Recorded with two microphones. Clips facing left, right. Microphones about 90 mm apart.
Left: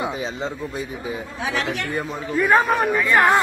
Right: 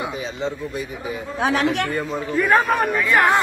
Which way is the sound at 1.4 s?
60° right (ahead or behind).